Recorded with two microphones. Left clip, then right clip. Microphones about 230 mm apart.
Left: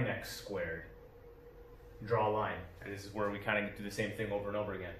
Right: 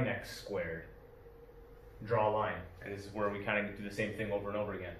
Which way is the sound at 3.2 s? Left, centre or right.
Left.